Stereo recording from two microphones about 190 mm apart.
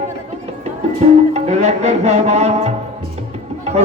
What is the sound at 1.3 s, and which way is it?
Music, 35° right (ahead or behind).